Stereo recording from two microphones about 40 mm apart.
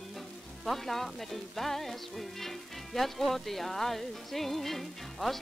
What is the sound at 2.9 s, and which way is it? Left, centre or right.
Speech, centre.